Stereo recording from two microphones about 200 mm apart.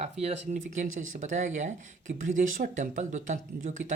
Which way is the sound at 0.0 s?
30° right (ahead or behind).